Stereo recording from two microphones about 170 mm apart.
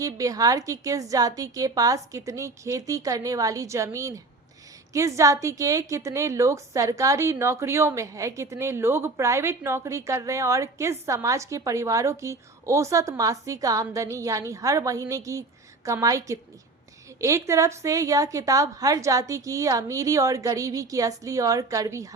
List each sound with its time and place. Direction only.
0.0 s a woman's voice: 20° right (ahead or behind)